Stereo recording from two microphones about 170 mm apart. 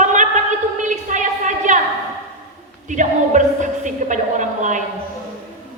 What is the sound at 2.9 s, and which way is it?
Speech, 45° right (ahead or behind).